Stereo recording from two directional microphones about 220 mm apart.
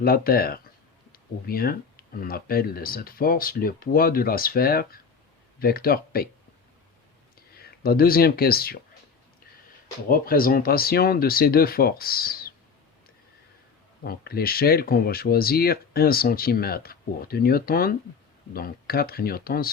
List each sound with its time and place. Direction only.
0.0 s speech: 40° left (ahead or behind)
7.5 s speech: 45° left (ahead or behind)
10.1 s speech: 40° left (ahead or behind)
14.0 s speech: 45° left (ahead or behind)